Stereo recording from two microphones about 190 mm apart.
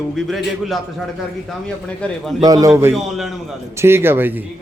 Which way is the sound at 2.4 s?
20° right (ahead or behind).